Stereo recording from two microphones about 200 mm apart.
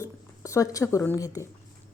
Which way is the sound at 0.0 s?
15° left (ahead or behind).